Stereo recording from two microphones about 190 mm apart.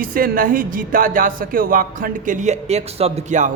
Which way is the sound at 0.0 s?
50° right (ahead or behind).